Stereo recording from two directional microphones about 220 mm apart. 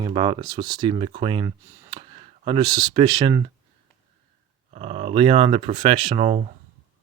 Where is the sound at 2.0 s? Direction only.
25° right (ahead or behind).